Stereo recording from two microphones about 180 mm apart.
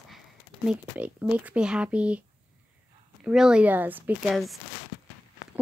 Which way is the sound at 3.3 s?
5° right (ahead or behind).